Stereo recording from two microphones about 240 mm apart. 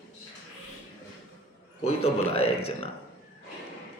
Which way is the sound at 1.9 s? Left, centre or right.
Left.